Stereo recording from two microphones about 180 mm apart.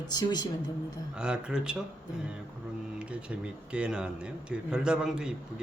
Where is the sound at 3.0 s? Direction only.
5° right (ahead or behind).